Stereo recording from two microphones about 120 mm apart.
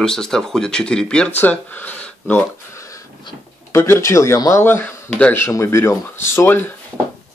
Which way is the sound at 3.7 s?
25° left (ahead or behind).